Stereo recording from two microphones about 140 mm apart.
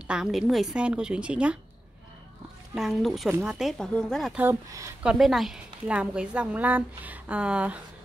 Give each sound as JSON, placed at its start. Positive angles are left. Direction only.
{"t": 0.1, "sound": "a woman's voice", "side_deg": -5}
{"t": 2.7, "sound": "speech", "side_deg": 0}
{"t": 3.3, "sound": "a woman's voice", "side_deg": -15}
{"t": 3.5, "sound": "speech", "side_deg": 0}
{"t": 4.4, "sound": "speech", "side_deg": -20}
{"t": 5.0, "sound": "a woman's voice", "side_deg": 0}